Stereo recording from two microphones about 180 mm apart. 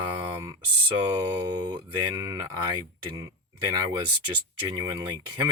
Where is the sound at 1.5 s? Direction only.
25° right (ahead or behind).